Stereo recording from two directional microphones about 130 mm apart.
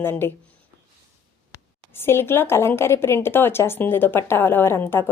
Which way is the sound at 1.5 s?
20° left (ahead or behind).